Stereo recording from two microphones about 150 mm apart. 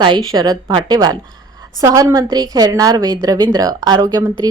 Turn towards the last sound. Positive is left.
turn(degrees=-25)  # may be behind; listen again after turning